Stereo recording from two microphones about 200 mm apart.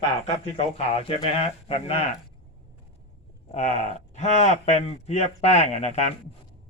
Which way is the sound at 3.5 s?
35° left (ahead or behind).